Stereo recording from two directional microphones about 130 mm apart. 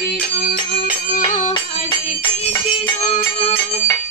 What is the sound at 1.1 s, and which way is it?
Music, 85° left.